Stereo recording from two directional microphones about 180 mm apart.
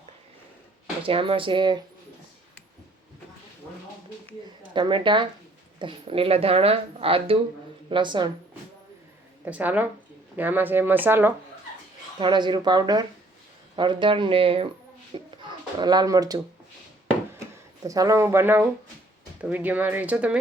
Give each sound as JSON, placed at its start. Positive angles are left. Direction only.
{"t": 1.0, "sound": "speech", "side_deg": -30}
{"t": 4.7, "sound": "speech", "side_deg": -25}
{"t": 9.4, "sound": "speech", "side_deg": -10}
{"t": 12.2, "sound": "speech", "side_deg": -25}
{"t": 15.1, "sound": "a sound", "side_deg": -25}
{"t": 17.8, "sound": "speech", "side_deg": -20}